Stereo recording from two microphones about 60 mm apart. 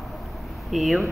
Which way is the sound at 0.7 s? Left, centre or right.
Centre.